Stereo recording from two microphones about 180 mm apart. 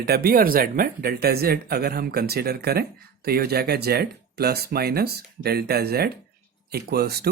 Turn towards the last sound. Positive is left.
turn(degrees=-60)  # may be behind; listen again after turning